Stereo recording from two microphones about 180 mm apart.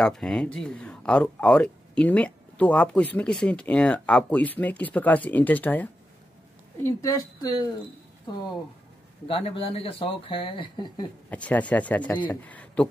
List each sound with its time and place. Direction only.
0.0 s speech: 5° left (ahead or behind); by 7.7 s 20° left (ahead or behind)
9.3 s speech: 30° left (ahead or behind)
11.2 s speech: 10° left (ahead or behind)